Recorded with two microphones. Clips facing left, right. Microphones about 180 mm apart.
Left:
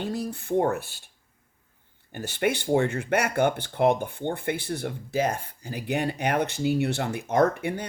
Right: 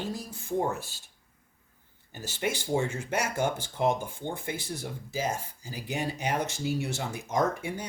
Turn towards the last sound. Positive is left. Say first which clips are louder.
# left 6 dB
turn(degrees=60)  # may be behind; listen again after turning